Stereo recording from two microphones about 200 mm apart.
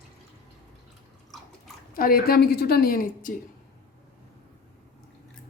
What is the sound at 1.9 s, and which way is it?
Speech, 45° left (ahead or behind).